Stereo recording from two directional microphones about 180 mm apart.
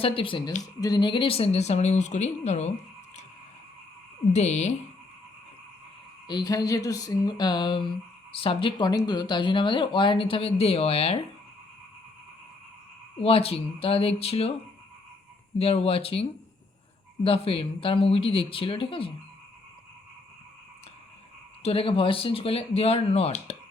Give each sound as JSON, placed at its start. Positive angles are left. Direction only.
{"t": 0.0, "sound": "speech", "side_deg": 30}
{"t": 4.3, "sound": "speech", "side_deg": 40}
{"t": 6.2, "sound": "speech", "side_deg": 20}
{"t": 13.1, "sound": "speech", "side_deg": 30}
{"t": 17.2, "sound": "speech", "side_deg": 30}
{"t": 21.6, "sound": "speech", "side_deg": 30}